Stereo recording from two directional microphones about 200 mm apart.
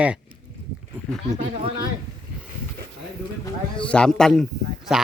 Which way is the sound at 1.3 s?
35° right (ahead or behind).